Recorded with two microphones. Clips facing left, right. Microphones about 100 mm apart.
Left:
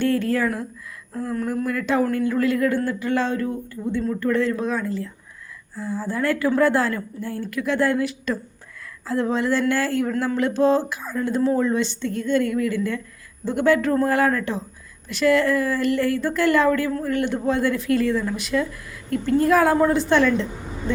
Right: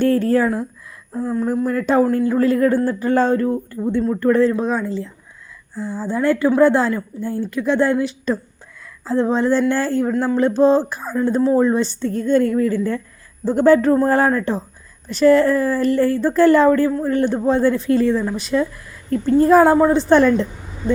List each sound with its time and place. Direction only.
0.0 s a woman's voice: 40° right (ahead or behind); by 1.5 s 20° right (ahead or behind)
1.6 s a woman's voice: 35° right (ahead or behind)